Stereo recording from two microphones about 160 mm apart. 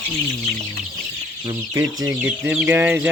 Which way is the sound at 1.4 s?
25° right (ahead or behind).